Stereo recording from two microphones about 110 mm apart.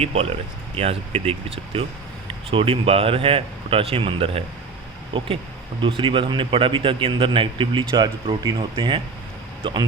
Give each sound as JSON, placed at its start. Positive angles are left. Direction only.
{"t": 0.0, "sound": "a man's voice", "side_deg": -70}